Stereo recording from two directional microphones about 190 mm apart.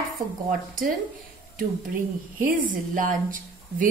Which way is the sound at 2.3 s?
45° right (ahead or behind).